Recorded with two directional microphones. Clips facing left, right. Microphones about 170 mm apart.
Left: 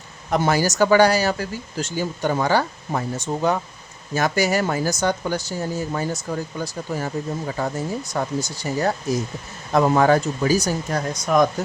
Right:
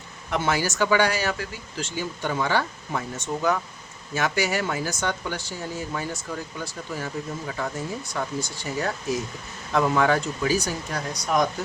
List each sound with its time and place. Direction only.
0.3 s speech: 40° left (ahead or behind)